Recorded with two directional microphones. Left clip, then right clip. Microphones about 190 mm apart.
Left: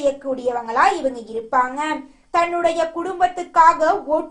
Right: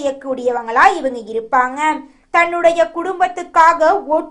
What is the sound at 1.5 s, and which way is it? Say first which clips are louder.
A woman's voice: right 4 dB; 30° right (ahead or behind).